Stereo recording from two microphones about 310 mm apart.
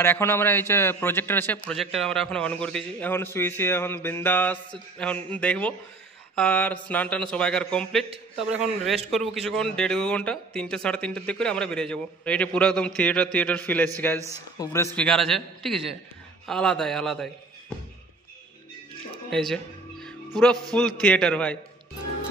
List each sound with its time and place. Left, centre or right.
0.0 s a man's voice: centre
19.3 s music: centre
20.7 s a man's voice: centre